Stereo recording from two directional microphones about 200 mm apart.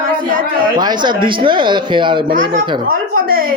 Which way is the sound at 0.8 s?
20° right (ahead or behind).